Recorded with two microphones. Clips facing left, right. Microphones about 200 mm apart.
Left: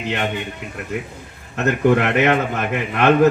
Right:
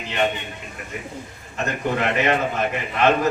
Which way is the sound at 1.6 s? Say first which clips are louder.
Left 7 dB; 65° left (ahead or behind).